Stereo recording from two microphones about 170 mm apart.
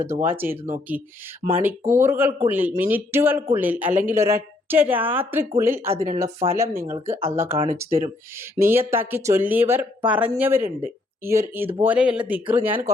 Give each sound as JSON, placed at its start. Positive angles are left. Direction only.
{"t": 0.0, "sound": "a woman's voice", "side_deg": -15}